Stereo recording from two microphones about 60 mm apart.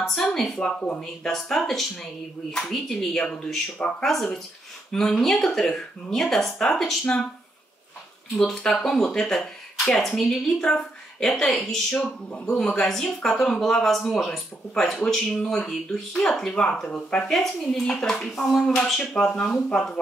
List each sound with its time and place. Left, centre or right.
0.0 s speech: centre
8.4 s speech: centre
12.0 s speech: centre
12.5 s speech: centre